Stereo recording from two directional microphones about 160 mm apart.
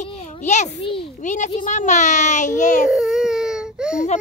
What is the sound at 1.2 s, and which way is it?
A child's voice, 50° left (ahead or behind).